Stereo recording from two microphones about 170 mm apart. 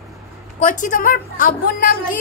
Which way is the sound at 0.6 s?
50° left (ahead or behind).